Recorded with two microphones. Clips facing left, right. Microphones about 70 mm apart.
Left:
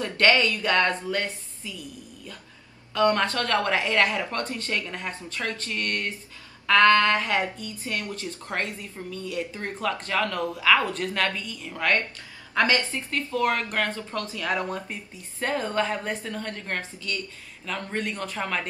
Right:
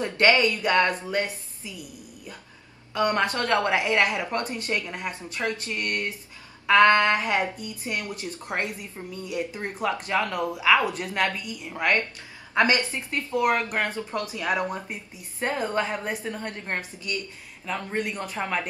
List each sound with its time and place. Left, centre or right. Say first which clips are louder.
0.0 s speech: right 1 dB; centre